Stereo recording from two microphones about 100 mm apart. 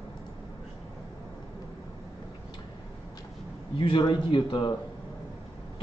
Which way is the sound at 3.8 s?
50° left (ahead or behind).